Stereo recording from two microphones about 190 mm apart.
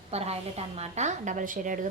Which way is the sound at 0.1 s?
35° right (ahead or behind).